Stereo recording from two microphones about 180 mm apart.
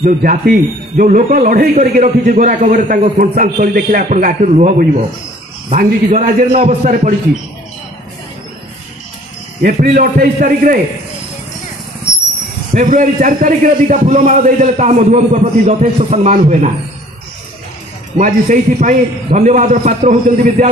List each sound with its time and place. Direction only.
0.0 s a man's voice: 50° right (ahead or behind)
9.6 s a man's voice: 50° right (ahead or behind)
12.7 s a man's voice: 45° right (ahead or behind)
18.1 s a man's voice: 45° right (ahead or behind)